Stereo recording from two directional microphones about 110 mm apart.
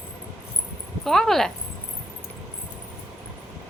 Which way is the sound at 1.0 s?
Centre (ahead or behind).